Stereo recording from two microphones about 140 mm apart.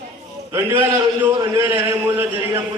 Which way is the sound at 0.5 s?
15° right (ahead or behind).